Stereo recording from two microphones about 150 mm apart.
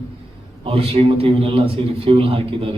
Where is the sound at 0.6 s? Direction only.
40° right (ahead or behind).